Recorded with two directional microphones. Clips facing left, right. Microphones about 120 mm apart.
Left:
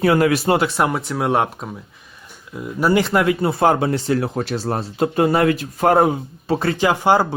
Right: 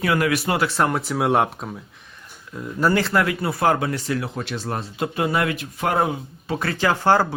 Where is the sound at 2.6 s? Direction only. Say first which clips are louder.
Left 3 dB; 10° left (ahead or behind); by 6.1 s 40° left (ahead or behind).